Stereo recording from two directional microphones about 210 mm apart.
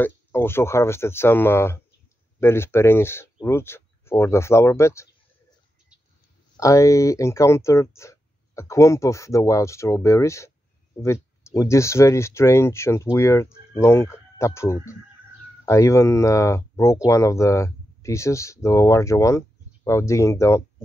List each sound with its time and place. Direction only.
0.0 s speech: 10° left (ahead or behind)
6.5 s speech: 15° left (ahead or behind)